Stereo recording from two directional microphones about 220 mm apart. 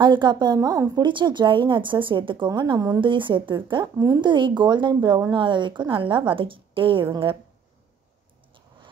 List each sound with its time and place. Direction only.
0.0 s a woman's voice: 20° right (ahead or behind)